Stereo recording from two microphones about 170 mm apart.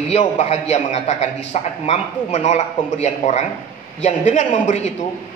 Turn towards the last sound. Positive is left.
turn(degrees=45)  # may be behind; listen again after turning